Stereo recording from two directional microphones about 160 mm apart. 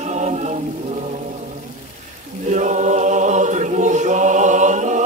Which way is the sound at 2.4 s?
50° right (ahead or behind).